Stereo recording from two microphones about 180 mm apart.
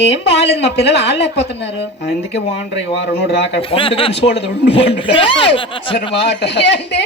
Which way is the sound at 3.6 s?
30° left (ahead or behind).